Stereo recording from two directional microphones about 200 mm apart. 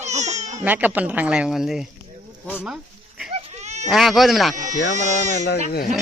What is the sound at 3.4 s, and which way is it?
Baby cry, 30° right (ahead or behind).